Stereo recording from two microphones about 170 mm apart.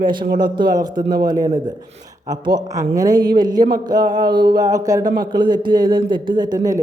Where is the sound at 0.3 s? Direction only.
25° right (ahead or behind).